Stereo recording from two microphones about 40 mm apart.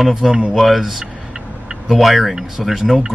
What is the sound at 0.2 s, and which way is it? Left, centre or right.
Speech, right.